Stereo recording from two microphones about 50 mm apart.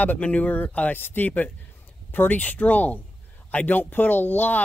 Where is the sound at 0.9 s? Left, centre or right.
Left.